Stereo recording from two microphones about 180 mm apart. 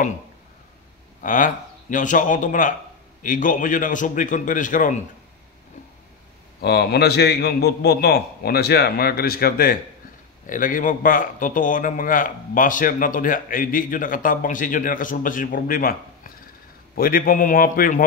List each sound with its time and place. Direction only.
1.2 s speech: 45° left (ahead or behind)
6.6 s a man's voice: 65° left (ahead or behind)